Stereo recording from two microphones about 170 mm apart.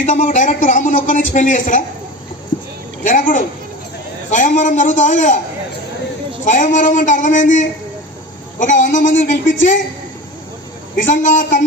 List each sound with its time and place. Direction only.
0.0 s a man's voice: 45° left (ahead or behind)
3.0 s a man's voice: 50° left (ahead or behind)
6.4 s a man's voice: 45° left (ahead or behind)
10.9 s a man's voice: 50° left (ahead or behind)